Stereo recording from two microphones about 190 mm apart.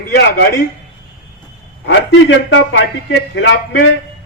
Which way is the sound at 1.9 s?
80° left.